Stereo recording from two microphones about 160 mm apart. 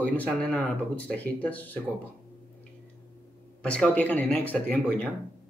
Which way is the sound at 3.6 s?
5° left (ahead or behind).